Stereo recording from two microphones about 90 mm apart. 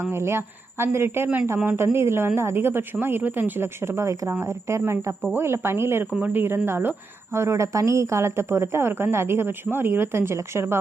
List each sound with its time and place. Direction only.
0.0 s a woman's voice: 30° right (ahead or behind)